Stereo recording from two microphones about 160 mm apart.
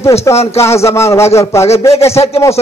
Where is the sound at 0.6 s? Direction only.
15° left (ahead or behind).